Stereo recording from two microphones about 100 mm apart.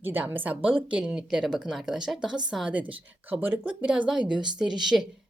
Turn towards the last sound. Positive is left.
turn(degrees=-5)  # may be behind; listen again after turning